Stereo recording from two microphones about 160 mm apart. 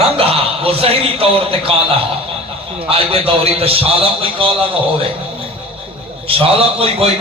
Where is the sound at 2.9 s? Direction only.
35° right (ahead or behind).